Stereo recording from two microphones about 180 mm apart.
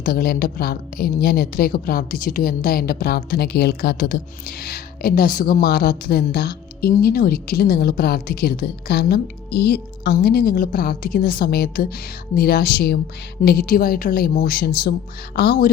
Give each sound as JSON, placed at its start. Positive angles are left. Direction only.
{"t": 0.0, "sound": "a woman's voice", "side_deg": 55}